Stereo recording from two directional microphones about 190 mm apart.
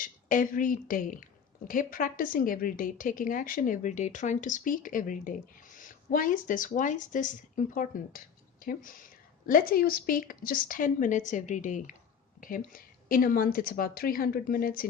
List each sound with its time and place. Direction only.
0.0 s a woman's voice: 45° left (ahead or behind)
9.5 s a woman's voice: 50° left (ahead or behind)